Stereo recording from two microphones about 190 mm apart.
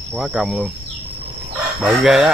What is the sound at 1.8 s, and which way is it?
Speech, 5° right (ahead or behind).